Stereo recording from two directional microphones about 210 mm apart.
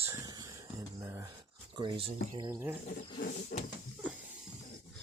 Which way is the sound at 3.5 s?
45° left (ahead or behind).